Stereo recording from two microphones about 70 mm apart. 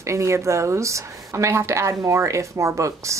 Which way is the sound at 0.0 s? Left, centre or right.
Right.